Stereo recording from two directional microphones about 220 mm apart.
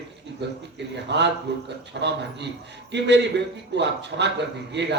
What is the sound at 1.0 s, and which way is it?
A man's voice, 50° right (ahead or behind).